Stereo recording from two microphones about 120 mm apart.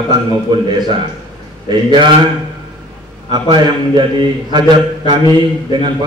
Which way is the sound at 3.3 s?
40° right (ahead or behind).